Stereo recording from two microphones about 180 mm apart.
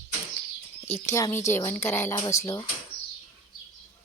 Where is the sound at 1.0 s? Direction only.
15° left (ahead or behind).